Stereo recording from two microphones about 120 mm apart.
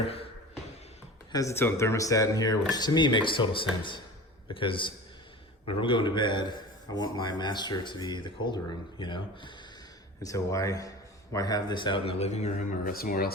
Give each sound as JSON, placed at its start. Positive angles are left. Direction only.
{"t": 1.3, "sound": "a man's voice", "side_deg": 25}
{"t": 10.2, "sound": "a man's voice", "side_deg": 25}